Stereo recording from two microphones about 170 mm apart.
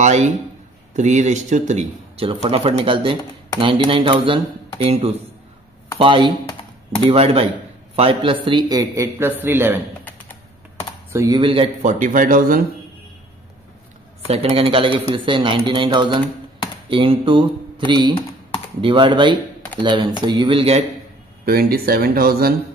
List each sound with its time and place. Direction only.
0.0 s speech: 45° right (ahead or behind); by 9.8 s 10° right (ahead or behind)
11.1 s speech: 20° right (ahead or behind)
11.4 s speech: 30° right (ahead or behind)
11.8 s speech: 50° right (ahead or behind)
14.2 s speech: 40° right (ahead or behind)
21.5 s speech: 65° right (ahead or behind)